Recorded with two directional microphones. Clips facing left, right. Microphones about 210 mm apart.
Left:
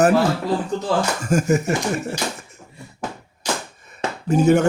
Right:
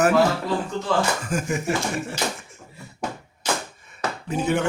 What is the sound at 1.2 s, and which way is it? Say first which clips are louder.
Speech: left 6 dB; 45° left (ahead or behind).